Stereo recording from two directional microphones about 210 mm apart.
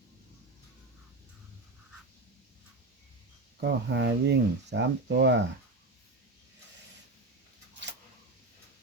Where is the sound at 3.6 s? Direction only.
55° right (ahead or behind).